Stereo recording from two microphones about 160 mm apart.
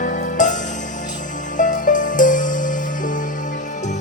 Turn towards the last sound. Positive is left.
turn(degrees=55)  # may be behind; listen again after turning